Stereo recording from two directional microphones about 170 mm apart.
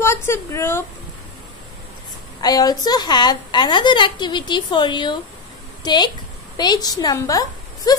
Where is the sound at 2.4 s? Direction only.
25° left (ahead or behind).